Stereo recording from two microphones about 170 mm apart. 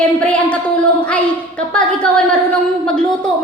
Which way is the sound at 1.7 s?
5° left (ahead or behind).